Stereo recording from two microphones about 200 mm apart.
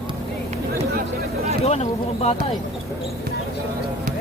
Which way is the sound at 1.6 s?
30° left (ahead or behind).